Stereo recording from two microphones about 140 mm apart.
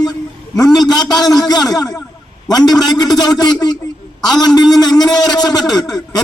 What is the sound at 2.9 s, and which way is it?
A man's voice, 30° left (ahead or behind).